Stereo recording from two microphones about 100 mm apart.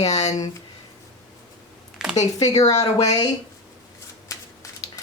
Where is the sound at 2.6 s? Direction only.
90° left.